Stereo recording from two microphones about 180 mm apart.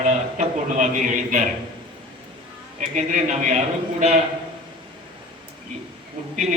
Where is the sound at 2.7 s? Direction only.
40° right (ahead or behind).